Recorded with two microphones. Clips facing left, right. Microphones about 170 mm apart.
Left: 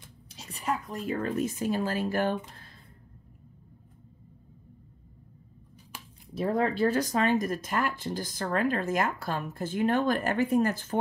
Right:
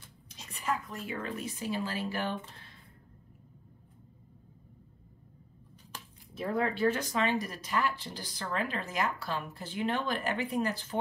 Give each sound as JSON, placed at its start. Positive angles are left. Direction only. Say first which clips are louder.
{"t": 0.3, "sound": "speech", "louder": "left 2 dB", "side_deg": 35}
{"t": 6.3, "sound": "speech", "louder": "left 4 dB", "side_deg": 35}